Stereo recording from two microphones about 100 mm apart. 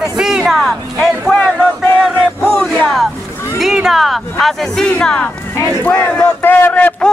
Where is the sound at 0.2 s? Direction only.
5° right (ahead or behind).